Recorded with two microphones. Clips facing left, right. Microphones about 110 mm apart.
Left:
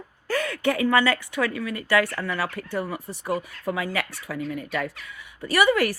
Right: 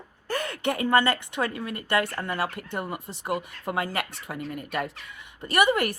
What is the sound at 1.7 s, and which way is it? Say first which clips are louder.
Speech: left 3 dB; 50° right (ahead or behind).